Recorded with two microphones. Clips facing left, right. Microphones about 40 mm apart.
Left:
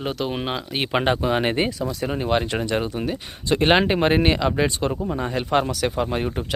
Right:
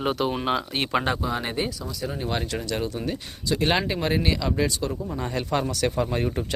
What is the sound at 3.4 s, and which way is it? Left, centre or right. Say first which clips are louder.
Speech: left 6 dB; left.